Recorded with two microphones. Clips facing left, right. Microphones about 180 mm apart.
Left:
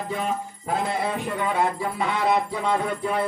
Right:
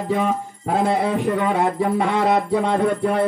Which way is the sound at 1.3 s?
50° right (ahead or behind).